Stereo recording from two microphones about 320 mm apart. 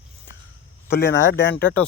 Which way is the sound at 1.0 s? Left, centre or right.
Left.